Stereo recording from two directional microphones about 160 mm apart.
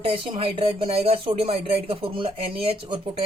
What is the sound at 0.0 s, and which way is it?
Speech, 35° right (ahead or behind).